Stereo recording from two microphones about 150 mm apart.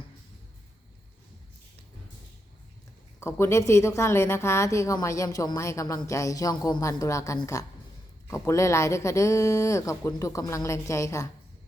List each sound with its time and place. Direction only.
3.2 s a woman's voice: 20° left (ahead or behind)